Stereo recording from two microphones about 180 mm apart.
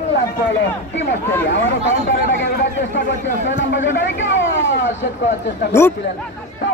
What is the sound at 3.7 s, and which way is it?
A man's voice, 90° left.